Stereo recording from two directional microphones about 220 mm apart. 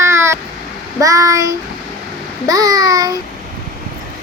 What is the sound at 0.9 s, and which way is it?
A child's voice, 15° right (ahead or behind).